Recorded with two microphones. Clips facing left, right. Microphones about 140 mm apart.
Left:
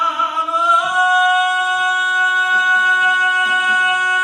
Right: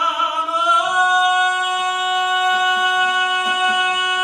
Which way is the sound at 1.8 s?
20° right (ahead or behind).